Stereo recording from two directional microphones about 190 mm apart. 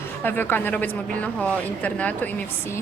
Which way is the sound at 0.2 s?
10° left (ahead or behind).